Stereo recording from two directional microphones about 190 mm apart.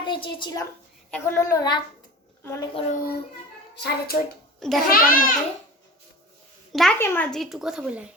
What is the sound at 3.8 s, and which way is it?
A child's voice, 55° left (ahead or behind).